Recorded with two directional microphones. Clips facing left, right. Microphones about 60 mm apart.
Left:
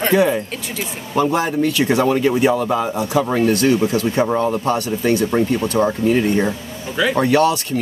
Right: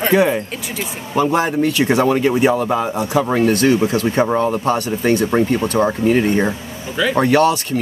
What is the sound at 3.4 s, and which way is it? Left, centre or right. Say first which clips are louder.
Speech: right 2 dB; right.